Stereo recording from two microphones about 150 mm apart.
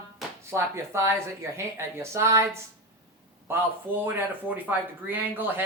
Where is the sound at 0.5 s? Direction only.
20° right (ahead or behind).